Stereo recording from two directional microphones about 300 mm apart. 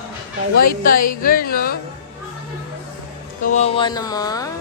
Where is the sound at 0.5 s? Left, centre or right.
Left.